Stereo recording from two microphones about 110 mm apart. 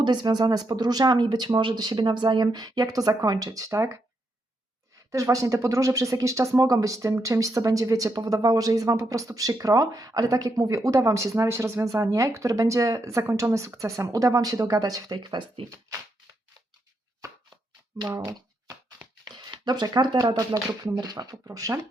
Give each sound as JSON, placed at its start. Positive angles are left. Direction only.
{"t": 0.0, "sound": "speech", "side_deg": -45}
{"t": 5.1, "sound": "speech", "side_deg": -30}
{"t": 18.1, "sound": "a sound", "side_deg": -30}
{"t": 19.2, "sound": "speech", "side_deg": -40}